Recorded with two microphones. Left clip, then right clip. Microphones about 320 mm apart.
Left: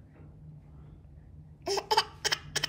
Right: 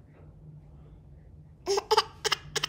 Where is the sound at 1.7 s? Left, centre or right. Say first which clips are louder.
Right 3 dB; centre.